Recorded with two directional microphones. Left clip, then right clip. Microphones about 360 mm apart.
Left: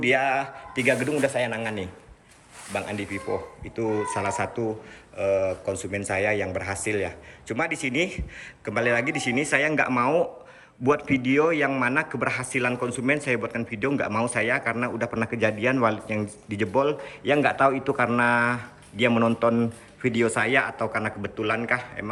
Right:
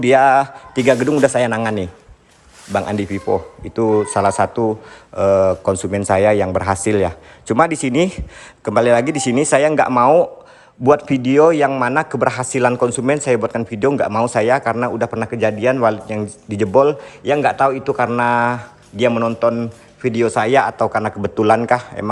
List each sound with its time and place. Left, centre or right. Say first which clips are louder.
0.0 s a man's voice: right 11 dB; centre
0.9 s speech: right 10 dB; right
1.3 s a man's voice: right 10 dB; centre
3.9 s a man's voice: right 12 dB; centre